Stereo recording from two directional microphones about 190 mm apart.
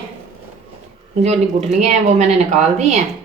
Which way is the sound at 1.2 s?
35° right (ahead or behind).